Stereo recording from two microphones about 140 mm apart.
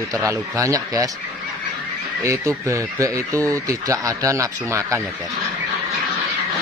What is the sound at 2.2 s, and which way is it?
Speech, 20° right (ahead or behind).